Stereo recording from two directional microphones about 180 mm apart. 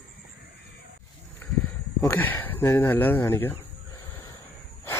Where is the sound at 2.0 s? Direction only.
10° left (ahead or behind).